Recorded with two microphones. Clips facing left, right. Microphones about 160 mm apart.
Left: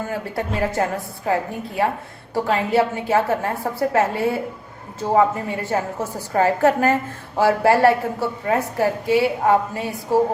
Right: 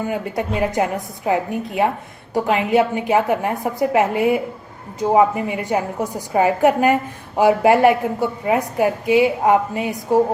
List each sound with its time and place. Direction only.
0.0 s a woman's voice: 20° right (ahead or behind)